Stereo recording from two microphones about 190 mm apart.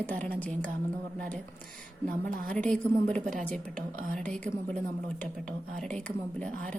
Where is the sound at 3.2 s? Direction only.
40° right (ahead or behind).